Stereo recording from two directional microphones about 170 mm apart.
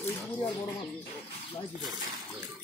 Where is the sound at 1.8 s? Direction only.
25° right (ahead or behind).